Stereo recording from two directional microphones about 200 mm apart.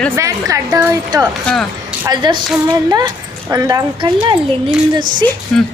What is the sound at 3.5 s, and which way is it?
Speech, 15° right (ahead or behind).